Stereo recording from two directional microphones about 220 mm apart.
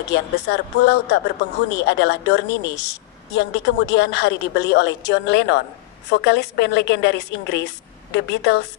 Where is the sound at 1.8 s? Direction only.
55° left (ahead or behind).